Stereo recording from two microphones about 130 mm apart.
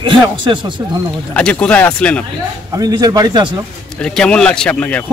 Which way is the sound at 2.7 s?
30° right (ahead or behind).